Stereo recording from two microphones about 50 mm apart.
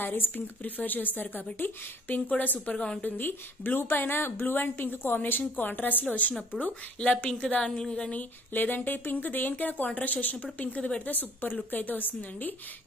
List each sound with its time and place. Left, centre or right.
0.0 s speech: left
6.6 s a woman's voice: left
8.2 s speech: left
11.1 s speech: left